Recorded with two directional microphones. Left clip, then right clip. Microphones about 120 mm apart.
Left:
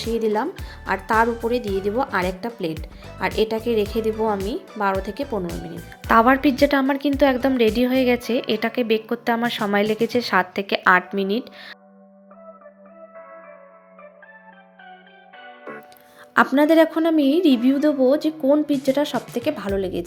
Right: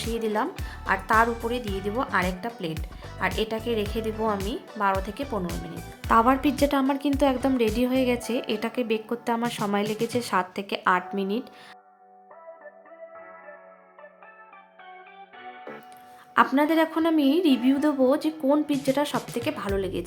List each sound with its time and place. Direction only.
0.0 s a woman's voice: 25° left (ahead or behind)
5.5 s speech: centre (ahead or behind)
6.1 s a woman's voice: 20° left (ahead or behind)
9.7 s a woman's voice: 25° left (ahead or behind)
10.1 s a woman's voice: 15° left (ahead or behind)
16.6 s a woman's voice: 45° left (ahead or behind)
17.7 s a woman's voice: 20° left (ahead or behind)
19.1 s speech: centre (ahead or behind)
19.4 s a woman's voice: 25° left (ahead or behind)